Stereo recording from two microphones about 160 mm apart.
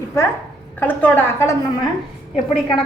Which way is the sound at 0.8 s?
10° left (ahead or behind).